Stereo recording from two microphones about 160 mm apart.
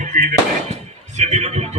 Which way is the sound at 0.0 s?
50° right (ahead or behind).